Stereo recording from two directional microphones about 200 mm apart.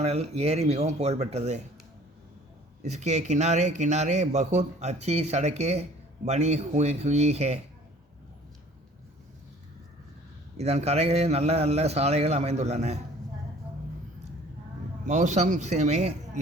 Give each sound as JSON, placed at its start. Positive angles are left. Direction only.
{"t": 0.0, "sound": "a man's voice", "side_deg": -30}
{"t": 2.8, "sound": "a man's voice", "side_deg": -35}
{"t": 10.6, "sound": "a man's voice", "side_deg": -35}
{"t": 15.0, "sound": "a man's voice", "side_deg": -35}